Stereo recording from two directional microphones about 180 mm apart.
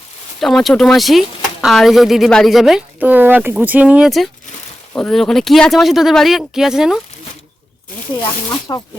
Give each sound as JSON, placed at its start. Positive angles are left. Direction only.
{"t": 0.3, "sound": "a woman's voice", "side_deg": 0}
{"t": 8.2, "sound": "speech", "side_deg": 20}